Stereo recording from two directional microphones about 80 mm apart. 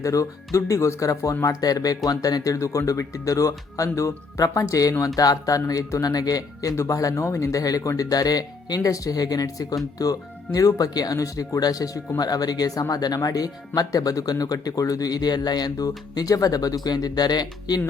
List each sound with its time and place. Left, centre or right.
0.0 s speech: left